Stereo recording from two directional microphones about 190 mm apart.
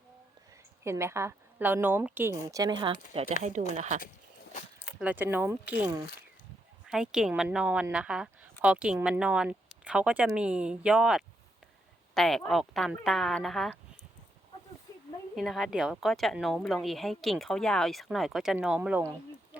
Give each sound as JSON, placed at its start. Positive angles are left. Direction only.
{"t": 0.9, "sound": "speech", "side_deg": -15}
{"t": 4.9, "sound": "a woman's voice", "side_deg": -10}
{"t": 15.4, "sound": "a woman's voice", "side_deg": 0}